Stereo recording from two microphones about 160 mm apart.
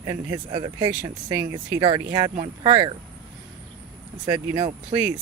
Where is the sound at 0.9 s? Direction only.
15° right (ahead or behind).